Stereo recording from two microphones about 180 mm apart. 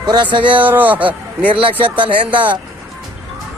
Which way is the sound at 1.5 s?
30° right (ahead or behind).